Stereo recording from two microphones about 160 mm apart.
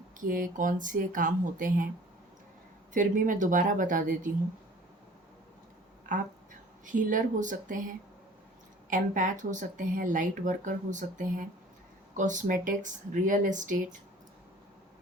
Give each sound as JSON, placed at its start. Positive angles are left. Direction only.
{"t": 0.2, "sound": "speech", "side_deg": -55}
{"t": 2.9, "sound": "speech", "side_deg": -55}
{"t": 6.1, "sound": "speech", "side_deg": -55}
{"t": 8.9, "sound": "speech", "side_deg": -55}